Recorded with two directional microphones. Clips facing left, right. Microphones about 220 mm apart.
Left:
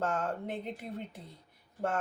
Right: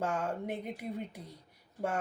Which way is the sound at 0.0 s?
10° right (ahead or behind).